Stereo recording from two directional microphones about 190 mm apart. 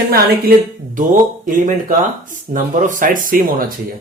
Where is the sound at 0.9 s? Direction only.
45° right (ahead or behind).